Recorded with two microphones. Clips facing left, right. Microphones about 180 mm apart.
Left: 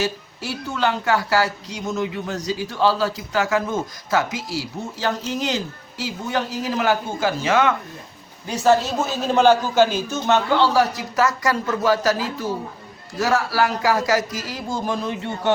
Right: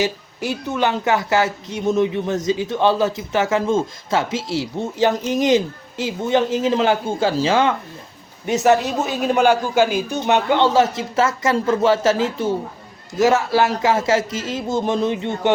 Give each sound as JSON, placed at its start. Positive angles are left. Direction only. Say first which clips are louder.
{"t": 0.0, "sound": "speech", "louder": "right 3 dB", "side_deg": -20}